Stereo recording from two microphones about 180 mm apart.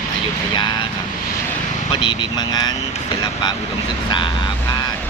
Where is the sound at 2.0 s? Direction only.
25° left (ahead or behind).